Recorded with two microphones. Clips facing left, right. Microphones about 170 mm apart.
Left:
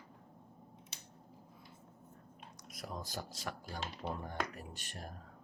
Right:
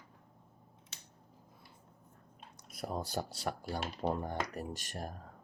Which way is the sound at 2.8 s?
40° right (ahead or behind).